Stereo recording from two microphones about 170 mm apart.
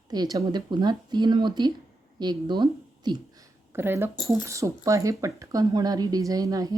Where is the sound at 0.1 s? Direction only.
20° right (ahead or behind).